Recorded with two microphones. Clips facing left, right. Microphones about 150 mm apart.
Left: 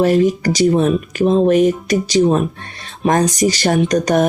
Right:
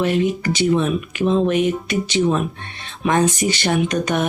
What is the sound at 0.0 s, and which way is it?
Speech, 40° left (ahead or behind).